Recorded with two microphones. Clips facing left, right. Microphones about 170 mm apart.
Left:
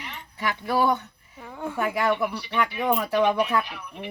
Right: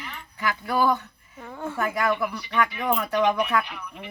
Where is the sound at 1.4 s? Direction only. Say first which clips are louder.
Even; 10° left (ahead or behind).